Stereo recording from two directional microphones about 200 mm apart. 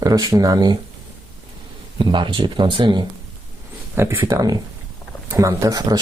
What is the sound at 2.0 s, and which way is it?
Speech, 25° right (ahead or behind).